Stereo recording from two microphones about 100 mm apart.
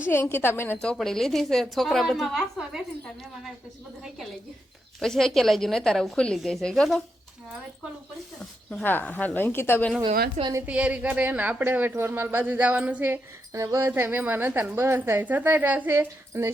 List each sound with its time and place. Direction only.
0.1 s a woman's voice: 25° left (ahead or behind)
0.8 s a woman's voice: 5° left (ahead or behind)
4.9 s a woman's voice: 5° left (ahead or behind)
8.8 s a woman's voice: 20° left (ahead or behind)
10.7 s speech: 15° right (ahead or behind)
13.5 s a woman's voice: 30° right (ahead or behind)